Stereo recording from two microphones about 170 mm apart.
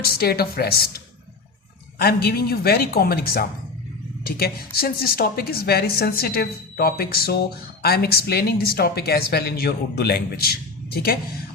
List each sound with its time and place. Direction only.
0.0 s a woman's voice: 65° left (ahead or behind)